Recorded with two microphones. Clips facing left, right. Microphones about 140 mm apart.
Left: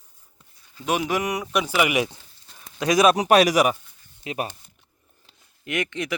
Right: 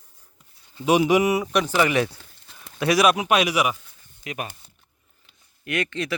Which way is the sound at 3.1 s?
35° left (ahead or behind).